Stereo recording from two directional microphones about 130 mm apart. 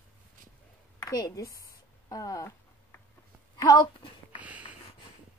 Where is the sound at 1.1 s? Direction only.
30° left (ahead or behind).